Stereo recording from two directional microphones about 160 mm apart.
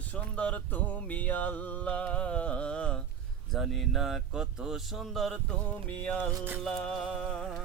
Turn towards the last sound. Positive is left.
turn(degrees=5)  # may be behind; listen again after turning